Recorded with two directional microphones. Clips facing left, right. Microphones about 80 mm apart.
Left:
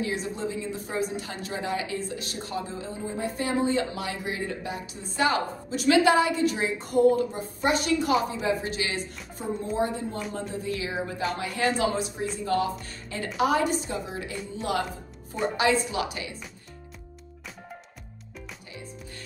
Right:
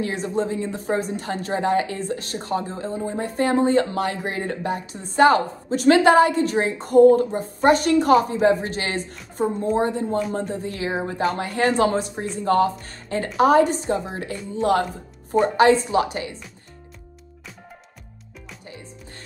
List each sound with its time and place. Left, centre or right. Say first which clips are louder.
0.0 s a woman's voice: right 6 dB; right